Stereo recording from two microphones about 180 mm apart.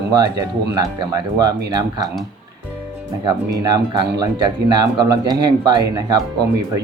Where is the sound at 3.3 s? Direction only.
20° right (ahead or behind).